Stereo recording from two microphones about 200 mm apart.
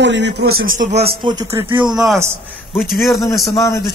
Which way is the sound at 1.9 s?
Centre (ahead or behind).